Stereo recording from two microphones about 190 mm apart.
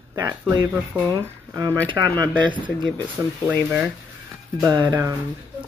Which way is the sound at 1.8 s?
10° left (ahead or behind).